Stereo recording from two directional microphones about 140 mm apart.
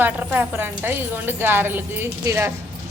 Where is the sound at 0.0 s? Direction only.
10° right (ahead or behind).